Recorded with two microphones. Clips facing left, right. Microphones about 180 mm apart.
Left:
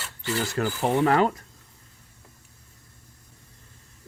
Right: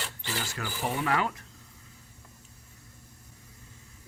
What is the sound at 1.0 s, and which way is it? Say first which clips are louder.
Speech: left 7 dB; 40° left (ahead or behind).